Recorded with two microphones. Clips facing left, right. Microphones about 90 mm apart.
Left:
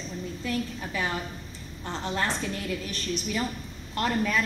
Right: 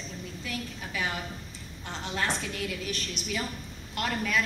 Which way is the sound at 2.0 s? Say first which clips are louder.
Left 2 dB; 40° left (ahead or behind).